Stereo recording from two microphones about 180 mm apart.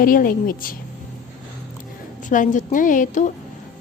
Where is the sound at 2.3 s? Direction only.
45° left (ahead or behind).